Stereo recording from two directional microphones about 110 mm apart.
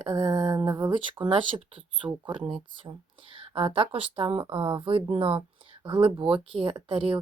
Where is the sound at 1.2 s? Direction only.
50° right (ahead or behind).